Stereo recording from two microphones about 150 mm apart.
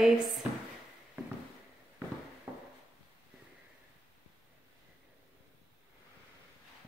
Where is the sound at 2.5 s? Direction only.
10° right (ahead or behind).